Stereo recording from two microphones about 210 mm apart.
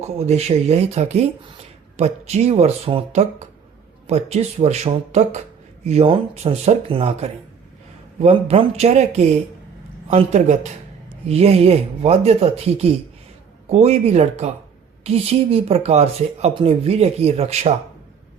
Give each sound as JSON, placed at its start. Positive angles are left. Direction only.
{"t": 0.0, "sound": "speech", "side_deg": -30}